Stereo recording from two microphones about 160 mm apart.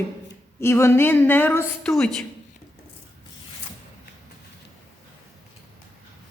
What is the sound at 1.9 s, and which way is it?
Speech, centre (ahead or behind).